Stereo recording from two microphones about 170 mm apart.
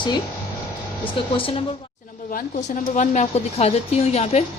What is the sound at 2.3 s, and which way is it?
A woman's voice, 45° left (ahead or behind).